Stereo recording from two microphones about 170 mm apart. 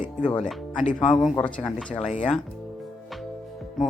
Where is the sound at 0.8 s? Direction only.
45° left (ahead or behind).